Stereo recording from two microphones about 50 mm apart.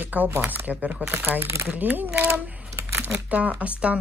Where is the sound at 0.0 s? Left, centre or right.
Right.